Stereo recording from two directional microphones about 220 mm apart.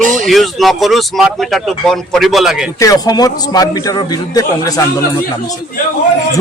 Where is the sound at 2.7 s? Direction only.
15° left (ahead or behind).